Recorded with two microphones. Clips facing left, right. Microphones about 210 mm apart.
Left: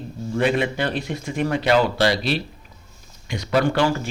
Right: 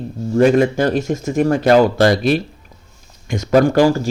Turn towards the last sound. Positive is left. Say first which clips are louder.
# right 7 dB
turn(degrees=-40)  # may be behind; listen again after turning